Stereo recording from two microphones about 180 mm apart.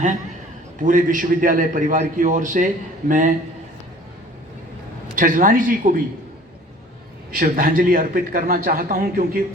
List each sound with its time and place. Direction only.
0.8 s a man's voice: 45° right (ahead or behind)
5.1 s a man's voice: 50° right (ahead or behind)
7.3 s a man's voice: 50° right (ahead or behind)